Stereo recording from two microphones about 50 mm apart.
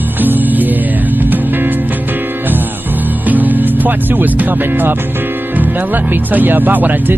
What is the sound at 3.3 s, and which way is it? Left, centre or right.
Speech, right.